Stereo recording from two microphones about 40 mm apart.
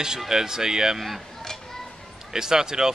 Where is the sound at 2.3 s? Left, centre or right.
Centre.